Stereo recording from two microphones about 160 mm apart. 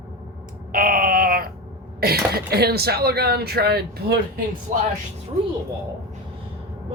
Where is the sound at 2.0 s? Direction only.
75° right (ahead or behind).